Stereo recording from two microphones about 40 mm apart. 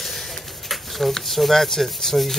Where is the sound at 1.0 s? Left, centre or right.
Centre.